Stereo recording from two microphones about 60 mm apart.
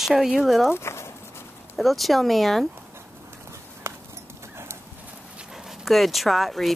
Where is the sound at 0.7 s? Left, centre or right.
Left.